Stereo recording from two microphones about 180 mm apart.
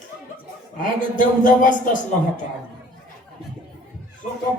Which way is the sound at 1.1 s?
45° left (ahead or behind).